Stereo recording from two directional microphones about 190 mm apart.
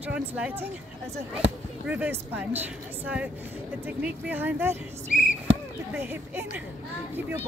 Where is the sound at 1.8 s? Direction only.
10° right (ahead or behind).